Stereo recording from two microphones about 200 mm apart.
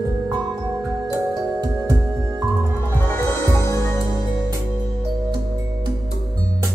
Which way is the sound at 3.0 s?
15° left (ahead or behind).